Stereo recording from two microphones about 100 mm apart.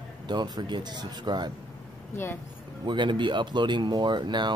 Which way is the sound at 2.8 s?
50° right (ahead or behind).